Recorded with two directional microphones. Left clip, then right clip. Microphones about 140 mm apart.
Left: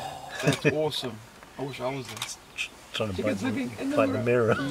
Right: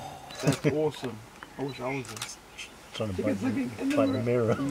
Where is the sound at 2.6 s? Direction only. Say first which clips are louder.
Left 5 dB; 35° left (ahead or behind).